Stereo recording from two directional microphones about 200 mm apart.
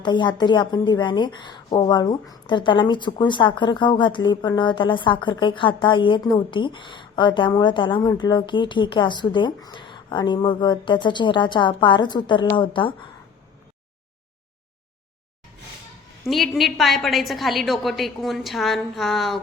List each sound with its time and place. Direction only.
0.0 s a woman's voice: 25° left (ahead or behind)
16.2 s a woman's voice: centre (ahead or behind)